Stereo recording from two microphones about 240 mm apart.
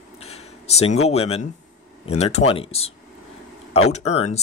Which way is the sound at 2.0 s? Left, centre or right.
Left.